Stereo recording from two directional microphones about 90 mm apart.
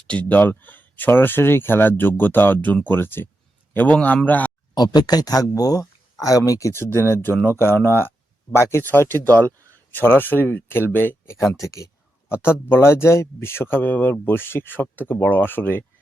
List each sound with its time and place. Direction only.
0.1 s speech: 15° left (ahead or behind)
4.7 s speech: 50° left (ahead or behind)
12.6 s speech: 25° left (ahead or behind)